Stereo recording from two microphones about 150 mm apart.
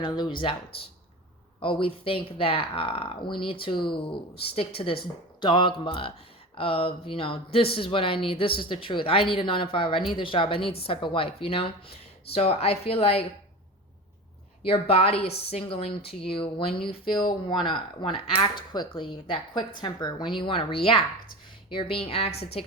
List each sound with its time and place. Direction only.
0.0 s speech: 30° left (ahead or behind)
1.6 s speech: 35° left (ahead or behind)
14.6 s speech: 40° left (ahead or behind)
22.3 s a woman's voice: 90° left